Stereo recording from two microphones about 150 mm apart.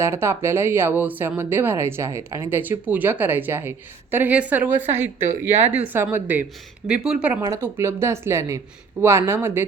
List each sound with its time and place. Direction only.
0.0 s speech: 15° right (ahead or behind)
7.5 s speech: 20° right (ahead or behind)